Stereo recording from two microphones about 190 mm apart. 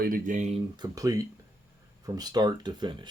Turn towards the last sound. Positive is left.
turn(degrees=-25)  # may be behind; listen again after turning